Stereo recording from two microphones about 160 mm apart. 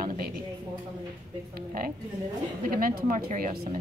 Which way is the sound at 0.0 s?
65° right (ahead or behind).